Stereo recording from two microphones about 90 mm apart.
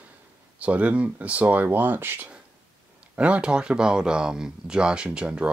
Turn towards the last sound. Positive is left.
turn(degrees=-10)  # may be behind; listen again after turning